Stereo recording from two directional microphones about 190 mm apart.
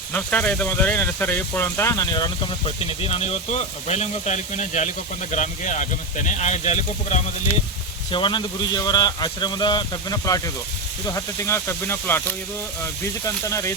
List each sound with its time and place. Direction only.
0.1 s speech: 5° left (ahead or behind); by 7.2 s 35° left (ahead or behind)
8.1 s a man's voice: 25° left (ahead or behind)
13.2 s speech: 15° left (ahead or behind)